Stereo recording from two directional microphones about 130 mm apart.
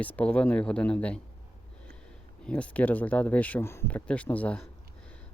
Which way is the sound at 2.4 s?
10° left (ahead or behind).